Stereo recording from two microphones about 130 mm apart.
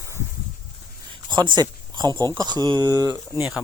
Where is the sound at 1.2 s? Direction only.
35° right (ahead or behind).